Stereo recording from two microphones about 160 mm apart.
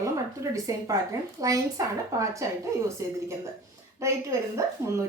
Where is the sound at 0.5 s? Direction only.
20° right (ahead or behind).